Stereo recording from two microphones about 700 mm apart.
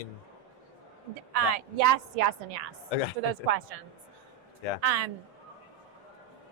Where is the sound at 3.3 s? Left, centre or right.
Right.